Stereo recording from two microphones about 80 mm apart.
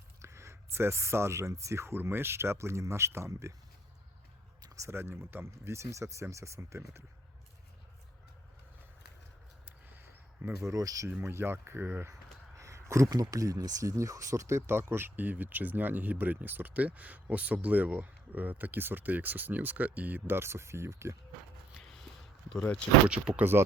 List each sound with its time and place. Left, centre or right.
0.2 s speech: right
4.6 s a sound: right
4.9 s speech: right
9.6 s a sound: right
10.6 s speech: right
11.2 s speech: right
12.5 s speech: right
23.0 s speech: centre
23.4 s speech: right